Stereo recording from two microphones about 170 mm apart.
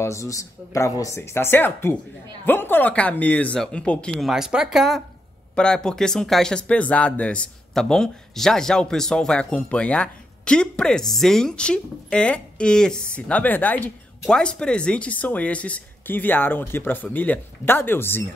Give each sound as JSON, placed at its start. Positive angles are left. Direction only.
{"t": 0.0, "sound": "speech", "side_deg": 15}